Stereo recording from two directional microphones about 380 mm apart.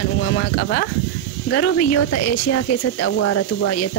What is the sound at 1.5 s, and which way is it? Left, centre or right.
Speech, left.